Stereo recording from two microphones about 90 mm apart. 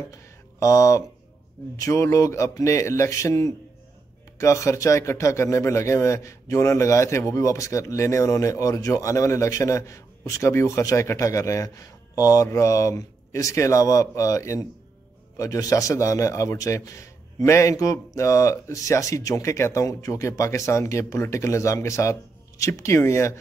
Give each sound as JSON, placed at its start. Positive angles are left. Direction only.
{"t": 0.6, "sound": "speech", "side_deg": 35}